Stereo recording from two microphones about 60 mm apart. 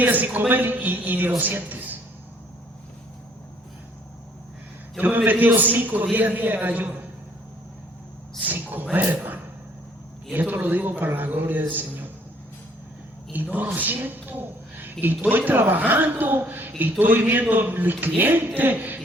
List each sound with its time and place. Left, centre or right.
0.0 s a man's voice: right
4.9 s a woman's voice: right
8.4 s a man's voice: right
13.3 s a man's voice: right